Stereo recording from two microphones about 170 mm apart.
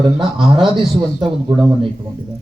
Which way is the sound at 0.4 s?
30° right (ahead or behind).